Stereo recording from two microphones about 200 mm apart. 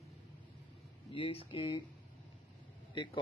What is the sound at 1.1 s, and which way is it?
Speech, 25° left (ahead or behind).